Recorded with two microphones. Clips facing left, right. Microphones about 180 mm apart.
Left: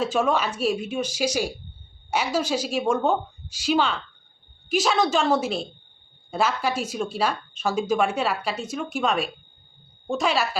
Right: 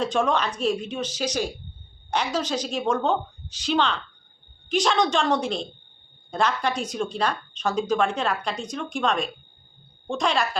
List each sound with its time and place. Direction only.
0.0 s a woman's voice: 5° left (ahead or behind)